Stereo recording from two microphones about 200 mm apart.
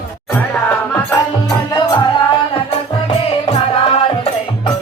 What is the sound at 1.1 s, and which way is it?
Music, 20° left (ahead or behind).